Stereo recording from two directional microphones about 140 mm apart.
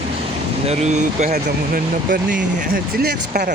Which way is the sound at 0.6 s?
50° right (ahead or behind).